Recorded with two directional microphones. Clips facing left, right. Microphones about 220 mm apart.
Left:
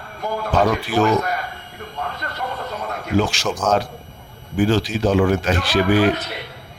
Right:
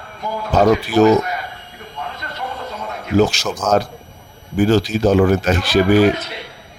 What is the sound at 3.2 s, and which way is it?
Speech, 40° right (ahead or behind).